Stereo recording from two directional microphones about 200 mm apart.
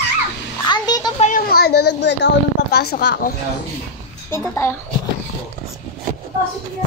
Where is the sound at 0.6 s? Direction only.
20° left (ahead or behind).